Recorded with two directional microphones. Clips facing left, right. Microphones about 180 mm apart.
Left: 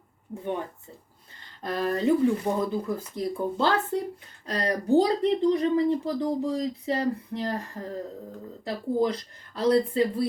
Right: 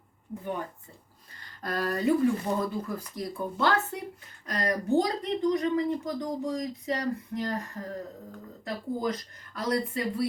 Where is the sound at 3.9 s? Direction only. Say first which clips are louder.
Left 8 dB; 30° left (ahead or behind).